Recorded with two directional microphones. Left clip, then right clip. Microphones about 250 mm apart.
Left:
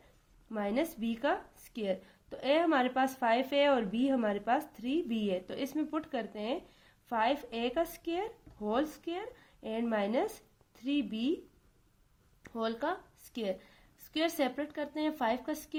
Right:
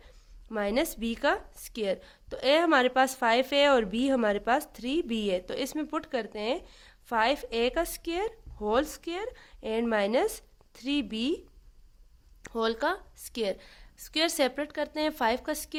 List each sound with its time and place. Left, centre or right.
0.5 s speech: right
12.4 s speech: right